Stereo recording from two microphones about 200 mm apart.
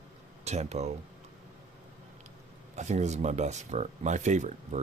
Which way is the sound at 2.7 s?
35° right (ahead or behind).